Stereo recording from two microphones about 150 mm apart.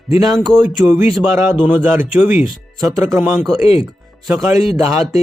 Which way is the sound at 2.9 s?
15° right (ahead or behind).